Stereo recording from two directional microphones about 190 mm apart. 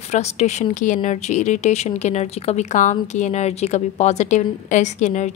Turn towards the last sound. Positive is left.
turn(degrees=40)  # may be behind; listen again after turning